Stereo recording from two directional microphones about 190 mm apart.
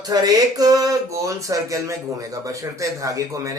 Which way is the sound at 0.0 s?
20° right (ahead or behind).